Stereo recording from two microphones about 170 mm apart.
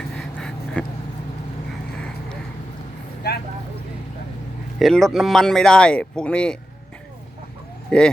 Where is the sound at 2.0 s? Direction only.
5° left (ahead or behind).